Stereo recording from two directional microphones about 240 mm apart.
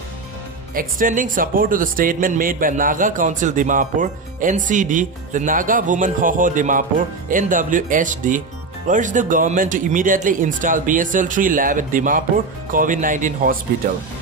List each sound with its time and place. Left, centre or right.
0.7 s a man's voice: right